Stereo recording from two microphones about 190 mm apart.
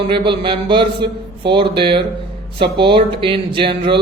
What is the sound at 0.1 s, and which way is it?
A man's voice, 25° right (ahead or behind).